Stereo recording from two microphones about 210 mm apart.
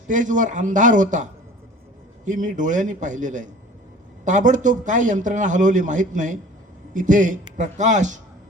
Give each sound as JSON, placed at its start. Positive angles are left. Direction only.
{"t": 0.1, "sound": "a man's voice", "side_deg": -35}